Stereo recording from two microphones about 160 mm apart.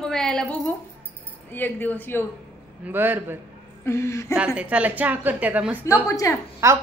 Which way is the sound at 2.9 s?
10° right (ahead or behind).